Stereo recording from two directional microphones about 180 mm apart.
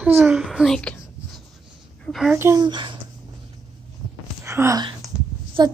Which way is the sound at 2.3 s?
15° right (ahead or behind).